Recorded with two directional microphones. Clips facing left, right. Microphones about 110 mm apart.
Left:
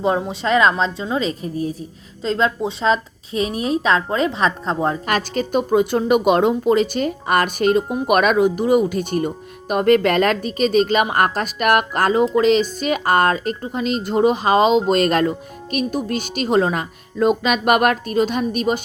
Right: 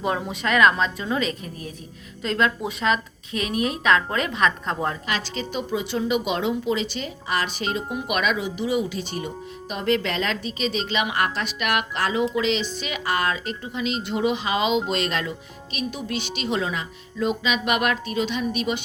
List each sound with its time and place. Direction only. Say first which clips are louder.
0.0 s a woman's voice: left 6 dB; 30° left (ahead or behind)
5.0 s speech: left 7 dB; 50° left (ahead or behind)